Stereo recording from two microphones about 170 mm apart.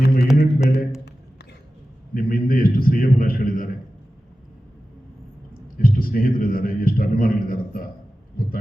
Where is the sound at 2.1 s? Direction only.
55° left (ahead or behind).